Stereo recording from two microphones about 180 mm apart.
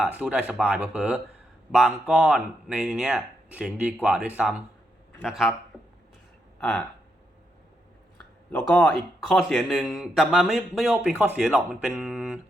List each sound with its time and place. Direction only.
0.0 s speech: 5° right (ahead or behind)
6.6 s speech: 5° left (ahead or behind)
8.2 s speech: 5° left (ahead or behind)